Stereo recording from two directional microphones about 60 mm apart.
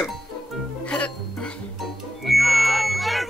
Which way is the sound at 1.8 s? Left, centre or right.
Centre.